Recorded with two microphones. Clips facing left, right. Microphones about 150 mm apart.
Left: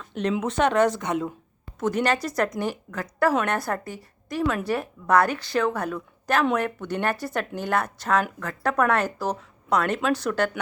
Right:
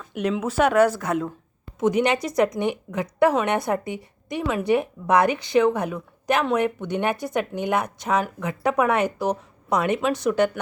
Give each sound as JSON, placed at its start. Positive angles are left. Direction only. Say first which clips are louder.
{"t": 0.1, "sound": "speech", "louder": "right 1 dB", "side_deg": -10}
{"t": 1.8, "sound": "a woman's voice", "louder": "right 3 dB", "side_deg": -15}